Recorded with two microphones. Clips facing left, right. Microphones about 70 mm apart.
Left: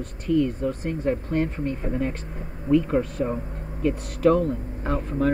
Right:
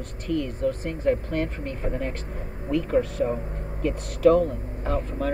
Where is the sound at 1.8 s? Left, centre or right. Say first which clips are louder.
Left 2 dB; centre.